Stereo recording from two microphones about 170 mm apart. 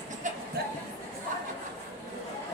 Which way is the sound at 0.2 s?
45° right (ahead or behind).